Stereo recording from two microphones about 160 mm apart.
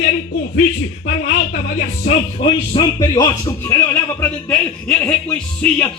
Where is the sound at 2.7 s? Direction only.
25° left (ahead or behind).